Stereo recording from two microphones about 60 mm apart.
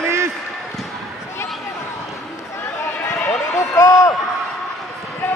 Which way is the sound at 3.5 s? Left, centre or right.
Left.